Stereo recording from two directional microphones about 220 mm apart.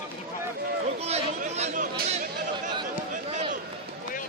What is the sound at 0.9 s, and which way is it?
Chatter, 30° right (ahead or behind).